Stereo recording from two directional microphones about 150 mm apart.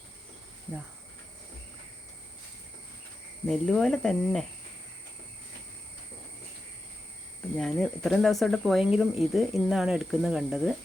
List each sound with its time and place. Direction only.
3.4 s speech: centre (ahead or behind)
7.5 s speech: centre (ahead or behind)